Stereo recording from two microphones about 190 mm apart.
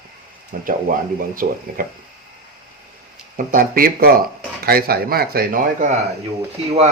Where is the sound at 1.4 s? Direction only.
50° right (ahead or behind).